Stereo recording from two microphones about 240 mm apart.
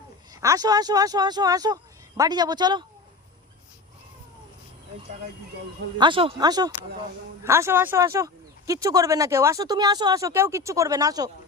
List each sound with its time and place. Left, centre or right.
0.4 s speech: centre
6.0 s speech: right